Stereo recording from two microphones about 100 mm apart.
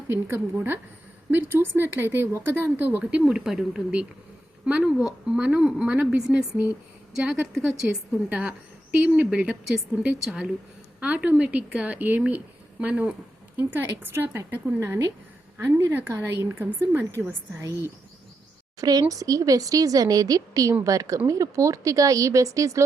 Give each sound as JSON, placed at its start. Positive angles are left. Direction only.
{"t": 0.1, "sound": "a woman's voice", "side_deg": -25}
{"t": 8.3, "sound": "a woman's voice", "side_deg": -15}